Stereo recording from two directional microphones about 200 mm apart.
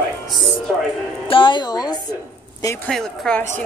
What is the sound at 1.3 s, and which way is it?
Speech, 25° left (ahead or behind).